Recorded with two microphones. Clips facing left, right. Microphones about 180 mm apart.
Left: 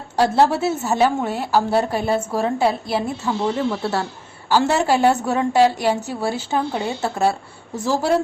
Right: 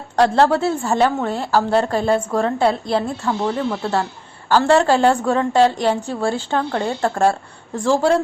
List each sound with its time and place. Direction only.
0.5 s a woman's voice: 5° left (ahead or behind)